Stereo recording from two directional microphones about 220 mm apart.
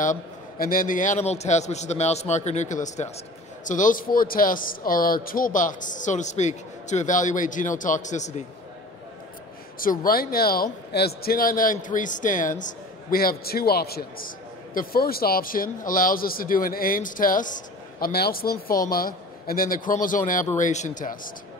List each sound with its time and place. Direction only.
0.0 s a man's voice: 40° left (ahead or behind)
9.8 s a man's voice: 40° left (ahead or behind)